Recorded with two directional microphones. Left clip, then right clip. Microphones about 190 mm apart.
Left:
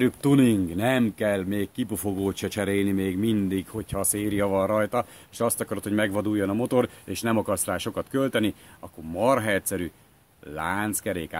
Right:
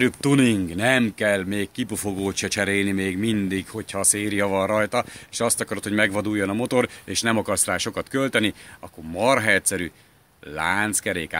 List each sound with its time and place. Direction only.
0.0 s speech: centre (ahead or behind)